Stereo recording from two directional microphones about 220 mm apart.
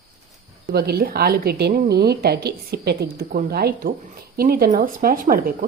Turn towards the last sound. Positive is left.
turn(degrees=-40)  # may be behind; listen again after turning